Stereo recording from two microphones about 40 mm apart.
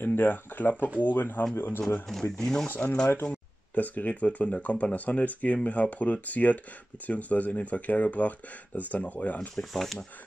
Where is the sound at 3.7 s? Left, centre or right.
Left.